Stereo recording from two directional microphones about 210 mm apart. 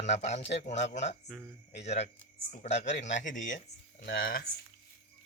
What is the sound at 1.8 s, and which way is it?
Speech, 30° left (ahead or behind).